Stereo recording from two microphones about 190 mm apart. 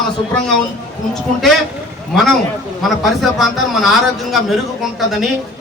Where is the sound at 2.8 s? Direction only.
Centre (ahead or behind).